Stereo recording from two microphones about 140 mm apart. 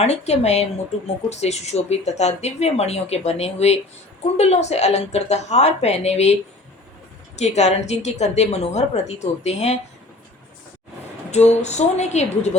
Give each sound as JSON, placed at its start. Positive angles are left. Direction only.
{"t": 0.0, "sound": "speech", "side_deg": 50}
{"t": 7.3, "sound": "speech", "side_deg": 50}
{"t": 11.3, "sound": "speech", "side_deg": 55}